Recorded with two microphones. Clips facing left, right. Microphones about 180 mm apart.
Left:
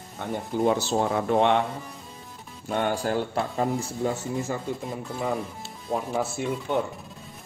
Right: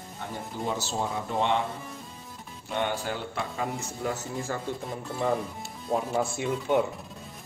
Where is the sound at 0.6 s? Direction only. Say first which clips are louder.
Left 7 dB; 60° left (ahead or behind).